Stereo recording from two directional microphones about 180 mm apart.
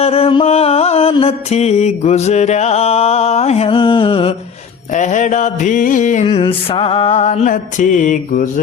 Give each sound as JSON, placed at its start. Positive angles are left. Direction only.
{"t": 0.0, "sound": "music", "side_deg": 35}
{"t": 4.9, "sound": "mantra", "side_deg": 40}
{"t": 6.2, "sound": "music", "side_deg": 30}